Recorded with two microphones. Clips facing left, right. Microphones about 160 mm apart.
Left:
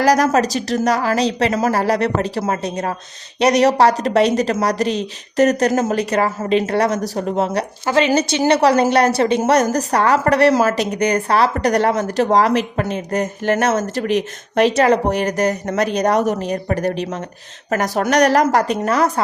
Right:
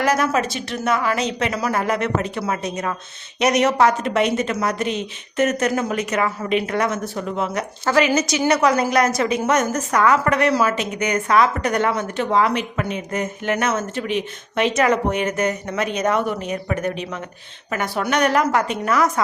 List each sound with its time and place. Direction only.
0.0 s a woman's voice: 40° left (ahead or behind)
7.9 s a woman's voice: 25° left (ahead or behind)